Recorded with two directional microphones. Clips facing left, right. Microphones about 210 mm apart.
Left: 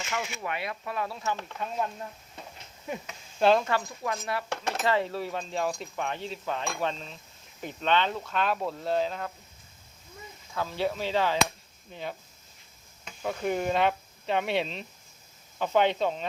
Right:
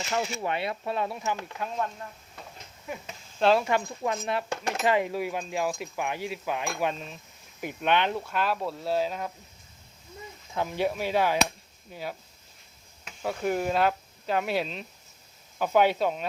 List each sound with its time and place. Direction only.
0.0 s speech: 35° right (ahead or behind); by 1.4 s 20° right (ahead or behind)
3.4 s speech: 5° right (ahead or behind)
3.7 s speech: 20° right (ahead or behind)
10.5 s speech: 15° right (ahead or behind)